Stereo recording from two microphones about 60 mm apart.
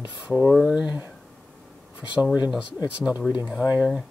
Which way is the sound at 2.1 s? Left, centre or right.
Right.